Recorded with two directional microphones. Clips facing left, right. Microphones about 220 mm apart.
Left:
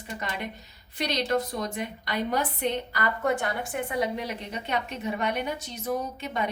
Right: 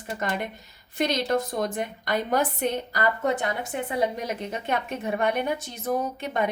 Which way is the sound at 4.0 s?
45° right (ahead or behind).